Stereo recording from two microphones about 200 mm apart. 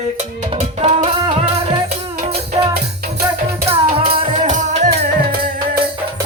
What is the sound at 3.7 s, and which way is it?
Music, 30° right (ahead or behind).